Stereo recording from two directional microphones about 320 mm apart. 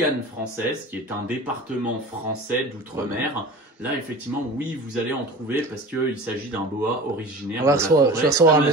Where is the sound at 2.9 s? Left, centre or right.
Centre.